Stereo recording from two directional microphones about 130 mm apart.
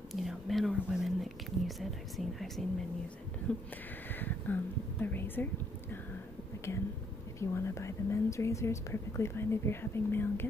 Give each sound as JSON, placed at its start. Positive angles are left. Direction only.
{"t": 0.1, "sound": "whispering", "side_deg": 0}
{"t": 4.1, "sound": "a sound", "side_deg": 15}
{"t": 5.0, "sound": "speech", "side_deg": 15}
{"t": 7.3, "sound": "speech", "side_deg": 20}